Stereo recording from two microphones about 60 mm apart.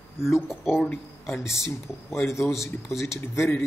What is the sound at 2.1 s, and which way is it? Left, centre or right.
A man's voice, left.